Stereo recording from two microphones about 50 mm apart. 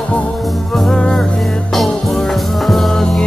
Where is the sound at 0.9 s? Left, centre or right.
Centre.